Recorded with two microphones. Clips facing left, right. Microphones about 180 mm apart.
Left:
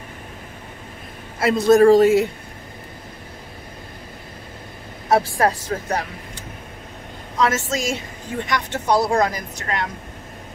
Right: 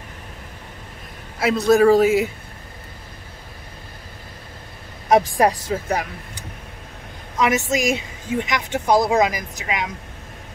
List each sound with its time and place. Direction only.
1.4 s a man's voice: centre (ahead or behind)
5.1 s a woman's voice: 15° right (ahead or behind)
7.3 s a woman's voice: 15° right (ahead or behind)